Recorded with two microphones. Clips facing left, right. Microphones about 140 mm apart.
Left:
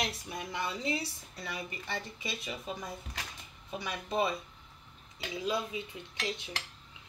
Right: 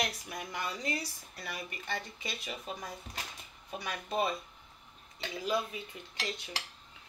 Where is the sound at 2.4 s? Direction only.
25° left (ahead or behind).